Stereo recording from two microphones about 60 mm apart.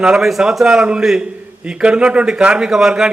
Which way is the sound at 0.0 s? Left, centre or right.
Centre.